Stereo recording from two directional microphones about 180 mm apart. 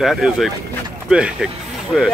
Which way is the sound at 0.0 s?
Centre (ahead or behind).